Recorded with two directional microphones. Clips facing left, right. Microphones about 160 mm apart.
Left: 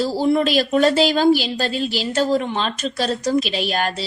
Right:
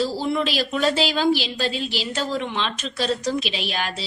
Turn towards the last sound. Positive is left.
turn(degrees=45)  # may be behind; listen again after turning